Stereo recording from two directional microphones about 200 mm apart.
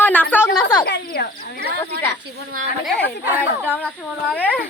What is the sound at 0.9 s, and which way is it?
Speech, 50° left (ahead or behind).